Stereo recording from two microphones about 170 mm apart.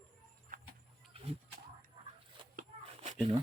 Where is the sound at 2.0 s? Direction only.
30° right (ahead or behind).